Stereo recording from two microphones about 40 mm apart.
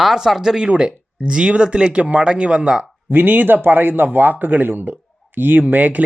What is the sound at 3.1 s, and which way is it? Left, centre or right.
A man's voice, right.